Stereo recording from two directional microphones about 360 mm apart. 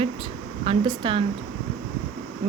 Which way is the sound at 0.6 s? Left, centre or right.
Centre.